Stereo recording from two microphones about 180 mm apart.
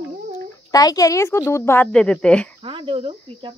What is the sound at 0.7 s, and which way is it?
A woman's voice, 20° left (ahead or behind).